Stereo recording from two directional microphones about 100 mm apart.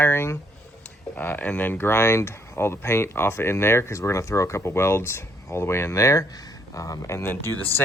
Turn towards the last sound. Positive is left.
turn(degrees=20)  # may be behind; listen again after turning